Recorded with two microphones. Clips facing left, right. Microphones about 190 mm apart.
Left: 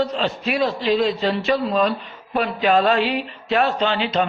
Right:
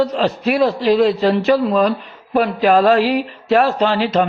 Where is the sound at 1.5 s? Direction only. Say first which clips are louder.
Right 5 dB; 35° right (ahead or behind).